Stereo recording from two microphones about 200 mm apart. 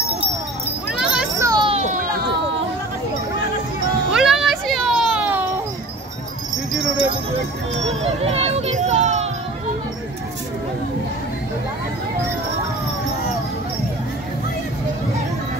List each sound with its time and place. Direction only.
0.9 s children playing: 5° right (ahead or behind)
1.4 s children playing: 20° right (ahead or behind)
1.7 s a sound: 35° right (ahead or behind)
4.1 s music: centre (ahead or behind)
7.8 s music: 30° right (ahead or behind)